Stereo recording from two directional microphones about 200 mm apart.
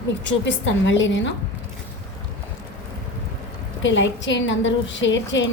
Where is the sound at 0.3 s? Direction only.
65° left (ahead or behind).